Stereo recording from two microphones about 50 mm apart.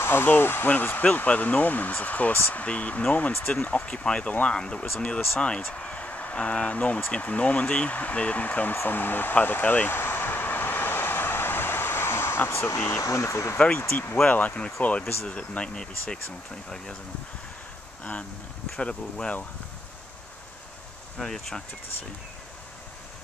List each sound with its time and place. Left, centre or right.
0.0 s speech: left
9.8 s vehicle: left
13.7 s speech: left
14.2 s speech: left; by 16.9 s centre
18.8 s speech: left
21.2 s speech: centre